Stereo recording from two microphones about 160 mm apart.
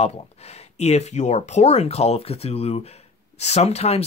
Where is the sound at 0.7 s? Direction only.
45° left (ahead or behind).